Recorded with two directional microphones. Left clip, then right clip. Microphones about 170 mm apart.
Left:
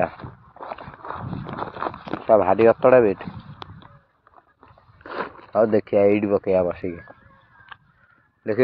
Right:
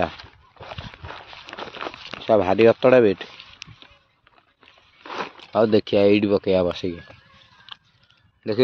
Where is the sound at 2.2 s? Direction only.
45° right (ahead or behind).